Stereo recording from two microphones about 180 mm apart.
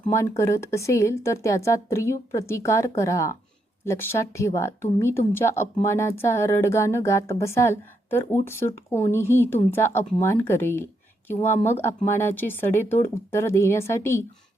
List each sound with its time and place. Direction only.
0.1 s speech: 15° left (ahead or behind)